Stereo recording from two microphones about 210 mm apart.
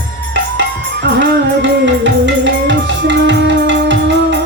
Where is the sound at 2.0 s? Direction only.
60° right (ahead or behind).